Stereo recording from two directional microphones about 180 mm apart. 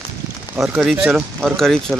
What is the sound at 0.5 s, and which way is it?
Speech, 5° right (ahead or behind).